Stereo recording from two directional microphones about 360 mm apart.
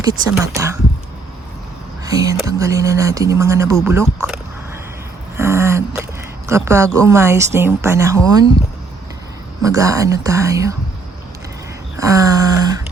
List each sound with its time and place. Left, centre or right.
0.0 s speech: centre
2.0 s speech: centre
5.4 s a sound: centre
6.5 s speech: centre
9.6 s speech: centre
11.9 s a sound: centre